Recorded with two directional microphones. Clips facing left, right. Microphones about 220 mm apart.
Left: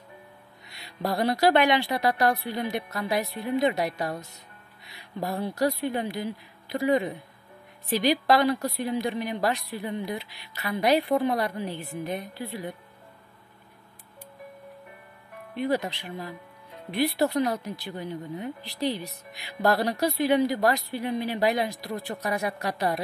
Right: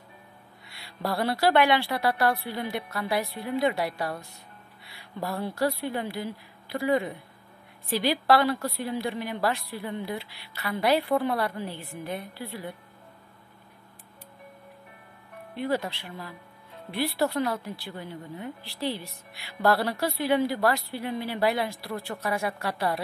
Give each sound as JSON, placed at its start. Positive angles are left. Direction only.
{"t": 0.7, "sound": "speech", "side_deg": 20}
{"t": 15.5, "sound": "speech", "side_deg": 15}